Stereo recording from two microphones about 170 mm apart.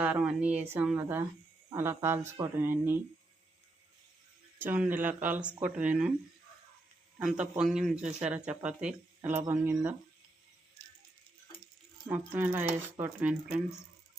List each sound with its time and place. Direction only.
0.0 s speech: 5° right (ahead or behind)
4.5 s speech: 10° right (ahead or behind)
7.3 s a man's voice: 5° right (ahead or behind)
12.0 s speech: 10° right (ahead or behind)